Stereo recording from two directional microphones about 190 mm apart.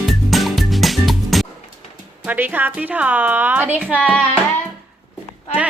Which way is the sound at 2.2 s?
10° right (ahead or behind).